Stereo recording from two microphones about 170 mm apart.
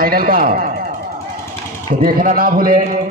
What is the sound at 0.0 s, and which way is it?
Speech, 60° right (ahead or behind).